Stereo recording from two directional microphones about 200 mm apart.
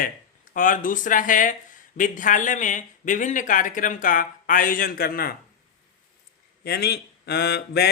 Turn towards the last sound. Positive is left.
turn(degrees=55)  # may be behind; listen again after turning